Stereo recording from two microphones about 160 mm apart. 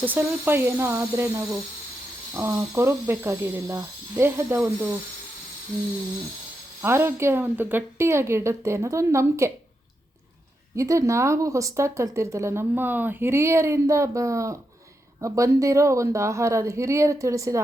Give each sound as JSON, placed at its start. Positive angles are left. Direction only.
{"t": 0.0, "sound": "speech", "side_deg": -15}
{"t": 6.8, "sound": "speech", "side_deg": -15}
{"t": 10.8, "sound": "a woman's voice", "side_deg": -20}